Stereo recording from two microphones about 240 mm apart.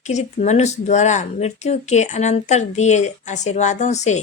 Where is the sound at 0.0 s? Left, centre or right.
Left.